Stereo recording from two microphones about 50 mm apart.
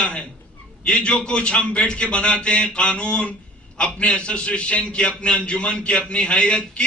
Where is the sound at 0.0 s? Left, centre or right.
Left.